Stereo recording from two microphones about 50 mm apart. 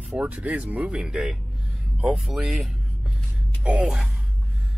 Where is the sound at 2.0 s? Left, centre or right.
Right.